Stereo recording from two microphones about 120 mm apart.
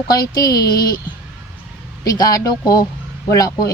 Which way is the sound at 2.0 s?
30° left (ahead or behind).